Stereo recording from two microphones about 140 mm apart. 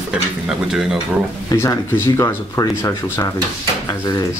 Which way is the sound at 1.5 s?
20° left (ahead or behind).